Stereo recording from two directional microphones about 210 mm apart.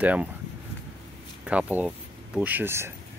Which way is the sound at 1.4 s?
5° right (ahead or behind).